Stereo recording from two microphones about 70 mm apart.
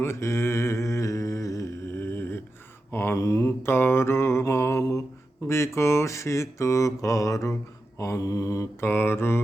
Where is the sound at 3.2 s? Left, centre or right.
Left.